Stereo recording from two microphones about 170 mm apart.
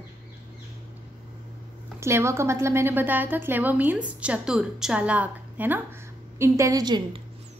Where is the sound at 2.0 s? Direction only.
15° right (ahead or behind).